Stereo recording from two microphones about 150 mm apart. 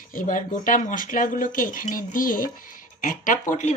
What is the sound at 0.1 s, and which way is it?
Speech, 65° left (ahead or behind).